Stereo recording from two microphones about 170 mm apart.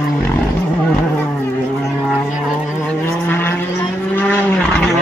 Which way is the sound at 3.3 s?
10° left (ahead or behind).